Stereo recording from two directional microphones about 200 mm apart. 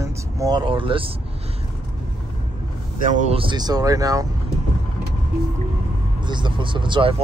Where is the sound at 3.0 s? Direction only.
40° right (ahead or behind); by 4.2 s 15° right (ahead or behind).